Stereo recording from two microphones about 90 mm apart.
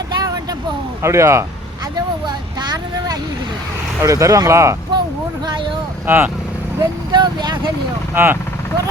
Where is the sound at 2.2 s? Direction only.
55° right (ahead or behind).